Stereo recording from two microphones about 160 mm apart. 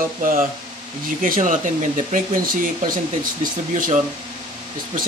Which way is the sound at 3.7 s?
45° right (ahead or behind).